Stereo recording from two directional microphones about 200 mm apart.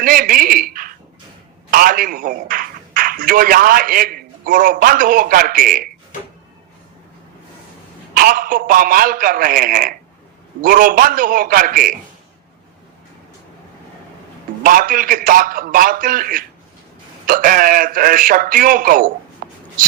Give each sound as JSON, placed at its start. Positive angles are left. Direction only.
{"t": 0.0, "sound": "a man's voice", "side_deg": -45}
{"t": 8.1, "sound": "a man's voice", "side_deg": -45}
{"t": 14.6, "sound": "a man's voice", "side_deg": -45}
{"t": 19.4, "sound": "a sound", "side_deg": -45}